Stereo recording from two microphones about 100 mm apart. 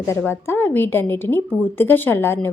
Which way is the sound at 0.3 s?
25° left (ahead or behind).